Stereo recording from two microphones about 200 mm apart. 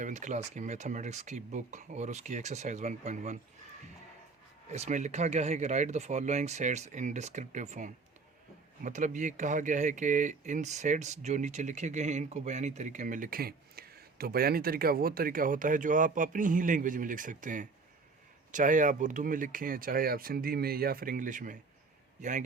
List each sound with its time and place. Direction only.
0.0 s speech: 35° right (ahead or behind)
4.7 s speech: 35° right (ahead or behind)